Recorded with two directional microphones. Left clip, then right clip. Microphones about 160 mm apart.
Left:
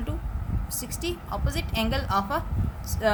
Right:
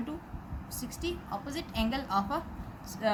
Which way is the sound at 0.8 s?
30° left (ahead or behind).